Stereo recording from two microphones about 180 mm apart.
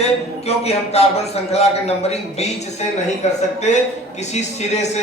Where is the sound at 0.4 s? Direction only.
35° left (ahead or behind).